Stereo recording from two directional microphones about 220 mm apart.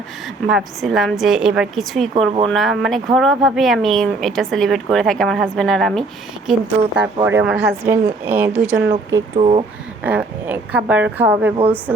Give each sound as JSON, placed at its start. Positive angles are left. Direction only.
{"t": 0.4, "sound": "speech", "side_deg": 0}
{"t": 9.3, "sound": "speech", "side_deg": -30}
{"t": 10.0, "sound": "speech", "side_deg": -5}